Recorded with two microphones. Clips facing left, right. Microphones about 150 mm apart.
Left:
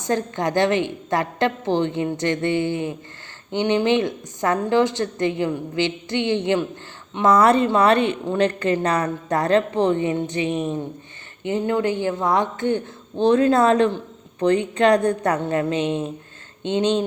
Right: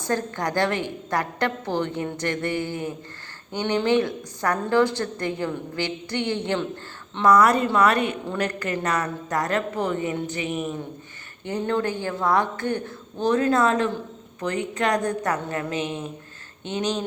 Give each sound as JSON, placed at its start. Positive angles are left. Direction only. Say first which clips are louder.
{"t": 0.0, "sound": "a woman's voice", "louder": "left 3 dB", "side_deg": 20}
{"t": 11.4, "sound": "a woman's voice", "louder": "left 4 dB", "side_deg": 15}